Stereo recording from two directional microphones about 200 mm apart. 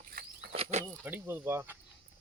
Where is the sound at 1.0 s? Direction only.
10° right (ahead or behind).